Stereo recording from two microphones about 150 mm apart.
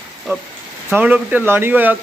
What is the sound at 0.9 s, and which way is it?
Speech, 10° right (ahead or behind).